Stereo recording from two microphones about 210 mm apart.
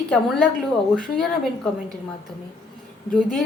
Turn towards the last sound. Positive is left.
turn(degrees=0)  # may be behind; listen again after turning